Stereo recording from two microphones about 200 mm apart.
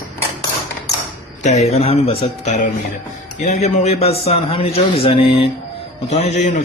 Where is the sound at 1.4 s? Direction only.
35° left (ahead or behind).